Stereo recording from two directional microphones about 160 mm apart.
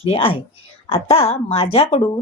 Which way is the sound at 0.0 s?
35° left (ahead or behind).